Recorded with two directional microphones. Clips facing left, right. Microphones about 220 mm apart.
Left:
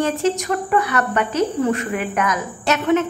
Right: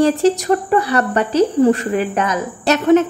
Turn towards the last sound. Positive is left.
turn(degrees=-35)  # may be behind; listen again after turning